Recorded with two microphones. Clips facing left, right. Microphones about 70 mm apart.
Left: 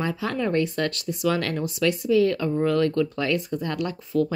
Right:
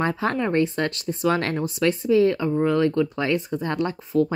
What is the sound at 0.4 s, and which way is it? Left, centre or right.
Speech, right.